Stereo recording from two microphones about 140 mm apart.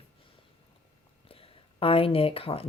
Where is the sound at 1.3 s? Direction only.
40° left (ahead or behind).